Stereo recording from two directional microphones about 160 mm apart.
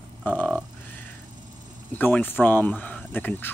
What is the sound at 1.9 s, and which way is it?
Speech, 10° left (ahead or behind).